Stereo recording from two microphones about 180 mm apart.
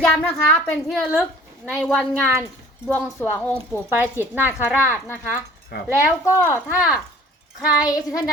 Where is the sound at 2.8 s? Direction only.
15° left (ahead or behind).